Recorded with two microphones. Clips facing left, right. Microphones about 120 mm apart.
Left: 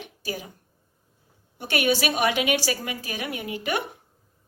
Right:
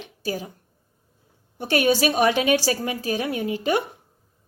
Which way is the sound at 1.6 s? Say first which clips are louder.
Right 4 dB; 35° right (ahead or behind).